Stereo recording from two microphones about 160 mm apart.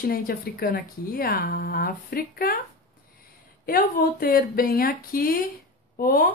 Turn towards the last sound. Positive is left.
turn(degrees=65)  # may be behind; listen again after turning